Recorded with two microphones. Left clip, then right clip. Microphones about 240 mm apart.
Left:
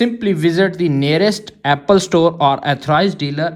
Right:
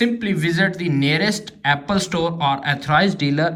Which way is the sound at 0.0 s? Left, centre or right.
Left.